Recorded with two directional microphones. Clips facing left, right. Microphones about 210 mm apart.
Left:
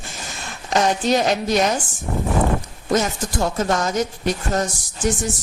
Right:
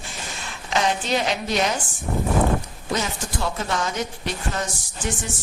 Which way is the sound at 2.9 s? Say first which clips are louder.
Left 6 dB; 45° left (ahead or behind).